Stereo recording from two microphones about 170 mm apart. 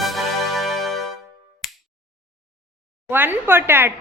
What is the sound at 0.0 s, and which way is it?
Music, centre (ahead or behind).